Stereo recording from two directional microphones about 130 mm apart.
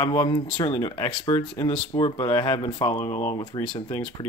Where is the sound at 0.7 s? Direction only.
30° left (ahead or behind).